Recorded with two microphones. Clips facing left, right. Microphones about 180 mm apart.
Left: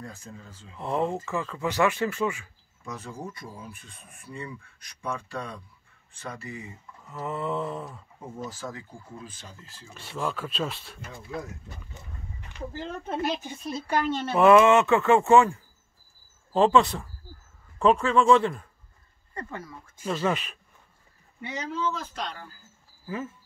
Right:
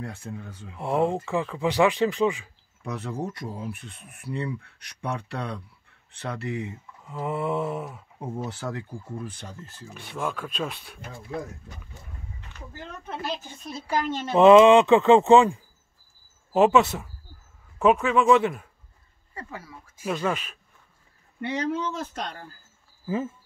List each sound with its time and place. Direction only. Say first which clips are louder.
0.0 s speech: right 6 dB; 70° right (ahead or behind)
0.7 s speech: right 3 dB; 15° right (ahead or behind)
2.8 s speech: right 6 dB; 65° right (ahead or behind)
7.1 s speech: right 3 dB; 10° right (ahead or behind)
8.4 s speech: right 3 dB; 70° right (ahead or behind)
9.9 s speech: even; centre (ahead or behind)
11.9 s a sound: even; 15° left (ahead or behind)
12.7 s speech: left 4 dB; 25° left (ahead or behind)
14.1 s speech: right 4 dB; 20° right (ahead or behind); by 20.3 s centre (ahead or behind)
21.4 s speech: right 5 dB; 65° right (ahead or behind); by 22.5 s 45° right (ahead or behind)
23.0 s speech: right 5 dB; 25° right (ahead or behind)